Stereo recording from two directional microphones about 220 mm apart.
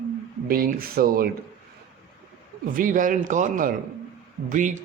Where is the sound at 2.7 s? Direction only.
35° right (ahead or behind).